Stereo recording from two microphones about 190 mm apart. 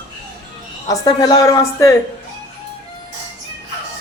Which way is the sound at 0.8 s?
20° left (ahead or behind).